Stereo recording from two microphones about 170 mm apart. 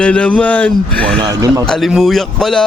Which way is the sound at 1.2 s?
20° right (ahead or behind).